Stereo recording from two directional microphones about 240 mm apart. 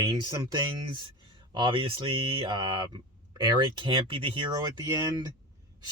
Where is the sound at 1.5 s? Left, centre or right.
Centre.